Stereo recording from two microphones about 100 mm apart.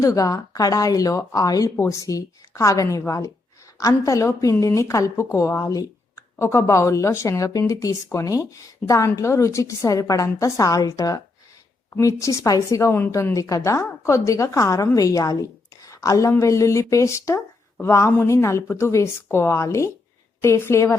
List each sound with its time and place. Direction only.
0.0 s a woman's voice: 35° left (ahead or behind)